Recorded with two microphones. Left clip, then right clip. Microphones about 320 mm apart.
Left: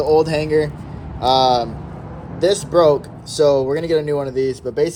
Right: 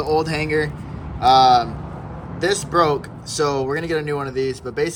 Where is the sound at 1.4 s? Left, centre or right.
Centre.